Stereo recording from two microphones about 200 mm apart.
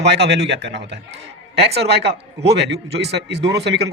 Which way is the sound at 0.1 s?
60° right (ahead or behind).